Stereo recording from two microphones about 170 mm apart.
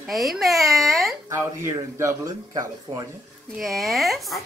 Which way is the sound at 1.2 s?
15° right (ahead or behind).